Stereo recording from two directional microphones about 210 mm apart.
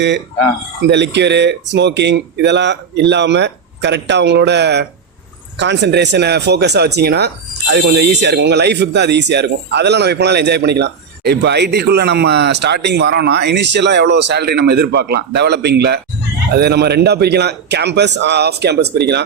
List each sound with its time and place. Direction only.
0.9 s speech: 55° right (ahead or behind)